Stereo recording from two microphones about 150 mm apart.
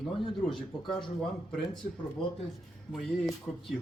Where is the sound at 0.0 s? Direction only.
Centre (ahead or behind).